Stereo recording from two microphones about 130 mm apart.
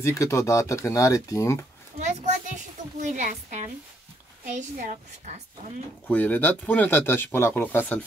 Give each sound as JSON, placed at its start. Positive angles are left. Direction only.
{"t": 0.0, "sound": "speech", "side_deg": 20}
{"t": 2.0, "sound": "a sound", "side_deg": -65}
{"t": 3.0, "sound": "a woman's voice", "side_deg": -70}
{"t": 4.6, "sound": "a woman's voice", "side_deg": -80}
{"t": 6.0, "sound": "speech", "side_deg": 15}